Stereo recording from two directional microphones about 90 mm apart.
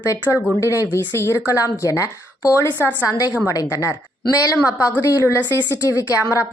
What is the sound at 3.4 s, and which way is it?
A woman's voice, 35° left (ahead or behind).